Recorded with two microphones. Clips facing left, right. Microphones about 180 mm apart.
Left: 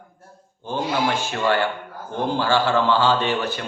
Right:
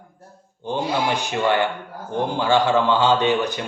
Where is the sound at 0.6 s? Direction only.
15° right (ahead or behind).